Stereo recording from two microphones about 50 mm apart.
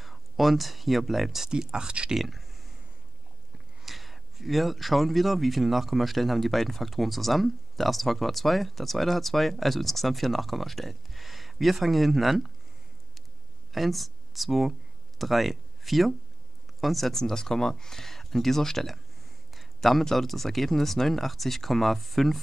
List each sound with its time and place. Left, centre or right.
0.0 s speech: centre
1.5 s speech: centre
2.1 s speech: centre
3.8 s speech: centre
13.7 s speech: centre